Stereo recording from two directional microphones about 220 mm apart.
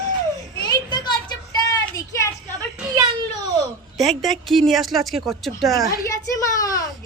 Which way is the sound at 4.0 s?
Centre (ahead or behind).